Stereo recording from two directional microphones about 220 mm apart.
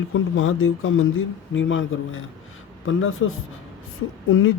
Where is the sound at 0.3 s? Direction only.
65° left (ahead or behind).